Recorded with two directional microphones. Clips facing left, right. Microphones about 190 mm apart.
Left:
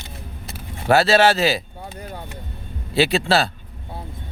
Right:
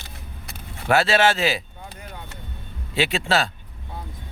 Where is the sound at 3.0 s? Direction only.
35° left (ahead or behind).